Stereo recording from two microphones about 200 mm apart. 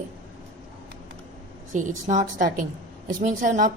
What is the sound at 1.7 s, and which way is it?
A woman's voice, 40° right (ahead or behind).